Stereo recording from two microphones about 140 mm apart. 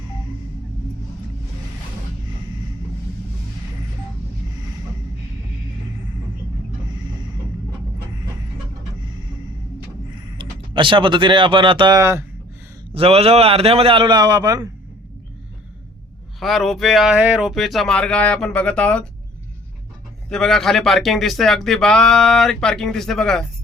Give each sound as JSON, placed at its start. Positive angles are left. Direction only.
{"t": 10.3, "sound": "speech", "side_deg": -35}
{"t": 12.9, "sound": "a man's voice", "side_deg": -45}
{"t": 16.4, "sound": "speech", "side_deg": 0}
{"t": 20.3, "sound": "speech", "side_deg": 5}